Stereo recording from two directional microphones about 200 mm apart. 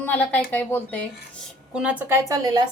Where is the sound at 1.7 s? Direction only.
5° right (ahead or behind).